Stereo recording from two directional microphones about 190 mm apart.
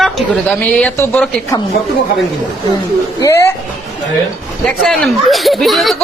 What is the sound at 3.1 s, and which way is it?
Speech, 15° left (ahead or behind).